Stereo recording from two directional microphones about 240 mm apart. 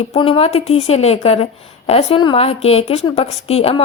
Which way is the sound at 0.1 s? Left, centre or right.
Left.